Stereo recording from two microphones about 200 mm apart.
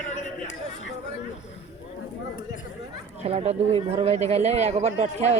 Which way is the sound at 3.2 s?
30° right (ahead or behind).